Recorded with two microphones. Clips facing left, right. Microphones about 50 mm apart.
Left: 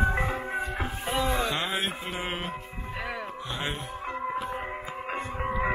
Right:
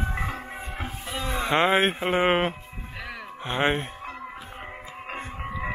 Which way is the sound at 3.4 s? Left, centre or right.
Right.